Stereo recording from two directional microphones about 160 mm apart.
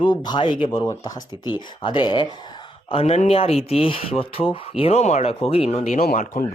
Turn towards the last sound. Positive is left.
turn(degrees=65)  # may be behind; listen again after turning